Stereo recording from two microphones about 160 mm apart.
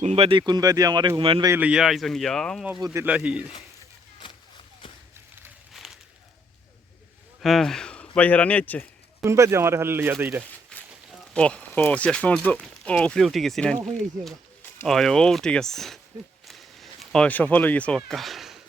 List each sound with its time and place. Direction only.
0.0 s speech: 40° right (ahead or behind)
1.5 s speech: 10° right (ahead or behind)
2.7 s speech: 25° right (ahead or behind)
3.0 s speech: 10° right (ahead or behind)
5.7 s a sound: centre (ahead or behind)
7.4 s speech: centre (ahead or behind)
9.2 s speech: 15° right (ahead or behind)
10.7 s a sound: 5° left (ahead or behind)
11.3 s speech: 5° left (ahead or behind)
14.8 s speech: centre (ahead or behind)
16.5 s a sound: centre (ahead or behind)